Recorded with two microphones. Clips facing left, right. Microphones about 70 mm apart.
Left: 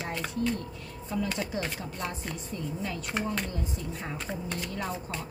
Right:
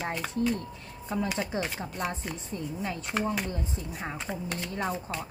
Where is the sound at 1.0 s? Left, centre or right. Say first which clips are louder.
Right 1 dB; right.